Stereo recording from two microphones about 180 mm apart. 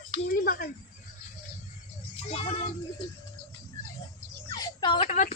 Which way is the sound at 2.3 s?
30° left (ahead or behind).